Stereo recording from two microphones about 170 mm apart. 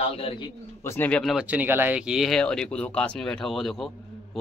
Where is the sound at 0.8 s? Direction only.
10° left (ahead or behind).